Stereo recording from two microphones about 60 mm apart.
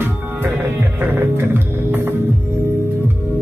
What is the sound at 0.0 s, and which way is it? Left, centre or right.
Music, right.